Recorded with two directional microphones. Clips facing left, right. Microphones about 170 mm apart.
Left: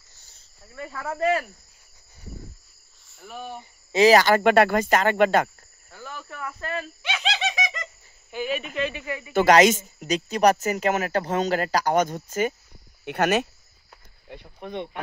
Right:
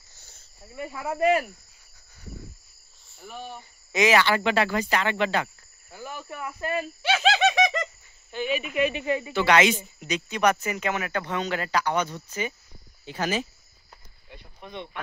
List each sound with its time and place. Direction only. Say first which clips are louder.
0.7 s cricket: right 1 dB; 15° right (ahead or behind)
3.2 s speech: left 1 dB; centre (ahead or behind)
3.5 s speech: left 5 dB; 30° left (ahead or behind); by 5.5 s 50° left (ahead or behind)
5.9 s cricket: right 2 dB; 10° right (ahead or behind)
7.0 s bird: right 8 dB; 40° right (ahead or behind)
8.3 s speech: even; 5° left (ahead or behind)
8.7 s cricket: right 3 dB; 15° right (ahead or behind)
9.0 s speech: right 6 dB; 25° right (ahead or behind)
9.3 s speech: left 6 dB; 40° left (ahead or behind)
13.0 s speech: left 6 dB; 65° left (ahead or behind)
14.3 s speech: left 6 dB; 55° left (ahead or behind)